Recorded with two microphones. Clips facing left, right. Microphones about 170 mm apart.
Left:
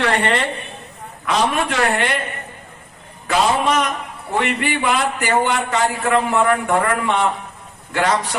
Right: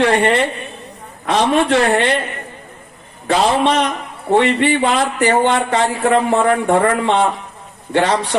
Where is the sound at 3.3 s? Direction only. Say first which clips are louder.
Right 3 dB; 30° right (ahead or behind).